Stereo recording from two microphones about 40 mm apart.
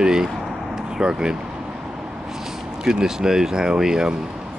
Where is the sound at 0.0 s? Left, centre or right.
Centre.